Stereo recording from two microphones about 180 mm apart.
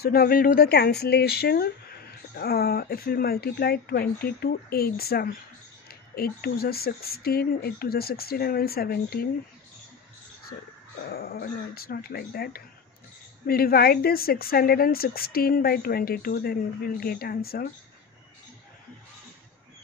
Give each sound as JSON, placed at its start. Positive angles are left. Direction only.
{"t": 0.0, "sound": "speech", "side_deg": 60}
{"t": 11.1, "sound": "speech", "side_deg": 55}